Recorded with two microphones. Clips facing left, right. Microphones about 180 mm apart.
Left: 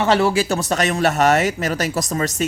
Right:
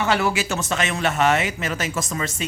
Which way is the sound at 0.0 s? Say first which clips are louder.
Left 5 dB; 35° left (ahead or behind).